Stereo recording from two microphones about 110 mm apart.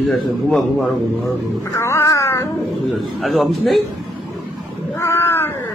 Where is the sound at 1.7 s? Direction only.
25° left (ahead or behind).